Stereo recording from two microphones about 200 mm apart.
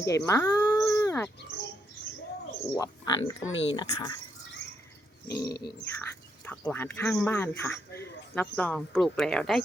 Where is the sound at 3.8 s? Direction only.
20° left (ahead or behind).